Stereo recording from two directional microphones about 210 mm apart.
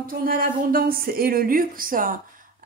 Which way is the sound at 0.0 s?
40° right (ahead or behind).